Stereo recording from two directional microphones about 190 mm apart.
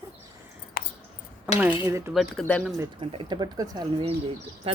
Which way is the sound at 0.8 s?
50° left (ahead or behind).